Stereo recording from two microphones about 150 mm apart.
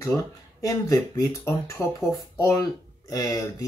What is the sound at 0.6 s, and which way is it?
Speech, 20° left (ahead or behind).